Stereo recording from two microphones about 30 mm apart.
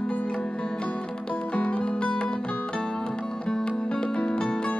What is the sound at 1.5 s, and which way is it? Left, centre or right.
Music, left.